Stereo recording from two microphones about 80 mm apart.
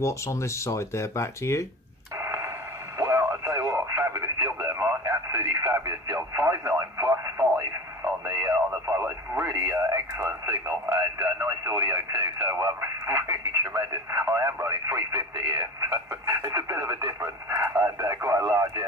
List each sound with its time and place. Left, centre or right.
0.0 s speech: left
2.1 s radio: right
9.5 s radio: right